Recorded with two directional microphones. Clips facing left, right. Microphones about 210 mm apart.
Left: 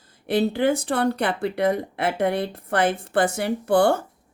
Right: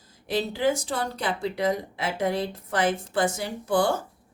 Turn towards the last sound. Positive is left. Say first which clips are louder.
# left 5 dB
turn(degrees=60)  # may be behind; listen again after turning